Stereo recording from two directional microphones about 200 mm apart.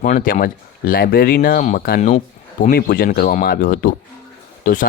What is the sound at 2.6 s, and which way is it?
Speech, 45° left (ahead or behind).